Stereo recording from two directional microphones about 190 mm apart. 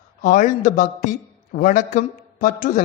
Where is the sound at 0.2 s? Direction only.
40° left (ahead or behind).